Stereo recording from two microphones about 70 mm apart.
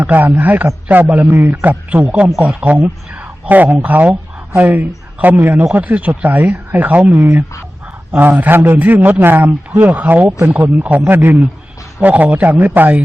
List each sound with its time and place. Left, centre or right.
0.0 s a man's voice: right